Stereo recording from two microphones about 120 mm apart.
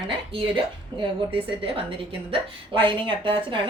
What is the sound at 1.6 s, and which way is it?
A woman's voice, 50° right (ahead or behind).